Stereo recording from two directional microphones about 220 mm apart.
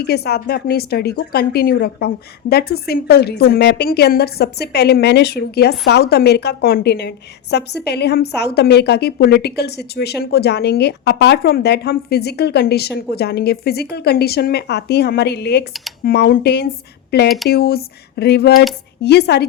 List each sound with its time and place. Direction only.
0.0 s a woman's voice: 45° left (ahead or behind)
17.2 s speech: centre (ahead or behind)
17.5 s a woman's voice: 45° left (ahead or behind)